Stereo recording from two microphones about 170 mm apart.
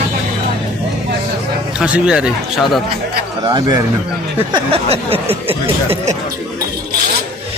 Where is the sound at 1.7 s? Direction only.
5° right (ahead or behind).